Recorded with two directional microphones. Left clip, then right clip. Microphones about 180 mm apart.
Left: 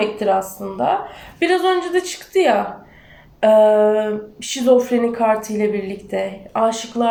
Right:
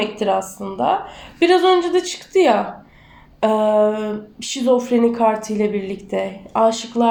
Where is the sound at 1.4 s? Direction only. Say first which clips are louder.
Right 3 dB; 35° right (ahead or behind).